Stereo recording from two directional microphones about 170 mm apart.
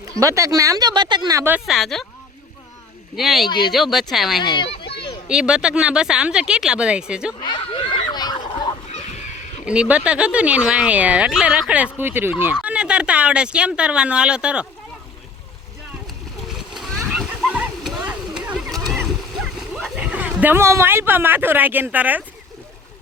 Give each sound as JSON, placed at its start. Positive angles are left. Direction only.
{"t": 0.2, "sound": "speech", "side_deg": -20}
{"t": 3.2, "sound": "speech", "side_deg": 0}
{"t": 4.4, "sound": "speech", "side_deg": 25}
{"t": 4.9, "sound": "a sound", "side_deg": 75}
{"t": 5.3, "sound": "speech", "side_deg": -5}
{"t": 7.4, "sound": "a sound", "side_deg": 30}
{"t": 9.6, "sound": "speech", "side_deg": -5}
{"t": 16.5, "sound": "splash", "side_deg": 0}
{"t": 19.7, "sound": "speech", "side_deg": -5}